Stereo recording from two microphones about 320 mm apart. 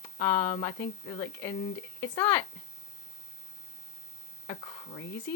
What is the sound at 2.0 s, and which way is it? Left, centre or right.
Speech, centre.